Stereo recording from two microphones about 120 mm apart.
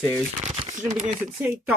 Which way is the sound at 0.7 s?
70° right (ahead or behind).